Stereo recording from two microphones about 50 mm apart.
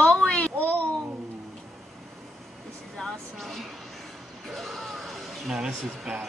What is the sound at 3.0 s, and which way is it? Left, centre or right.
Vehicle, centre.